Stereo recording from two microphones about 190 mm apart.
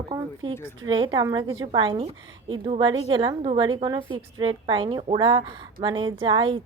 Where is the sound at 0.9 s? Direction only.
25° right (ahead or behind).